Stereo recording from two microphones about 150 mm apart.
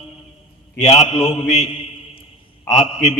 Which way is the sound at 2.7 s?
50° left (ahead or behind).